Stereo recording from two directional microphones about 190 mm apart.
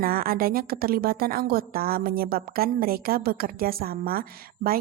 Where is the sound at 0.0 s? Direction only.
50° right (ahead or behind).